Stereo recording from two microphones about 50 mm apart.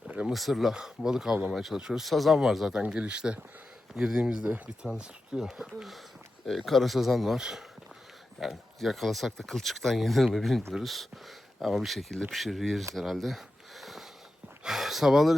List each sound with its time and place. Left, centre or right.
0.3 s speech: centre
0.7 s speech: centre
2.7 s speech: right
3.9 s speech: centre
4.2 s speech: right
5.4 s speech: centre
12.9 s sniff: centre
14.6 s speech: centre